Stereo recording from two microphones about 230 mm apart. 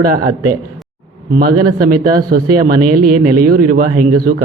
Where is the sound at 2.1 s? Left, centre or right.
Right.